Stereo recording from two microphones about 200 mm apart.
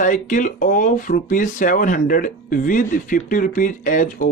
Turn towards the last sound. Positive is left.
turn(degrees=40)  # may be behind; listen again after turning